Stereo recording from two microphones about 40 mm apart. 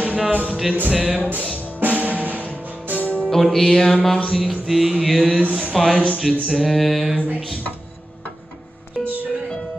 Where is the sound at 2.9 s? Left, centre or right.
Left.